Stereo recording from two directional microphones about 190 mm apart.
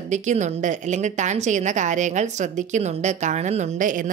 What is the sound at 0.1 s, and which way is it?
A woman's voice, 40° right (ahead or behind).